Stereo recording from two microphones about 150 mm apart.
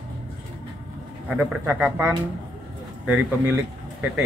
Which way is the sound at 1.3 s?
5° right (ahead or behind).